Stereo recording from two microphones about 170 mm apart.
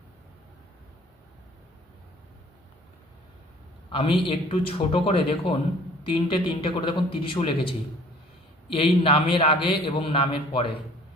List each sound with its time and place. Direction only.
3.8 s a man's voice: 30° left (ahead or behind)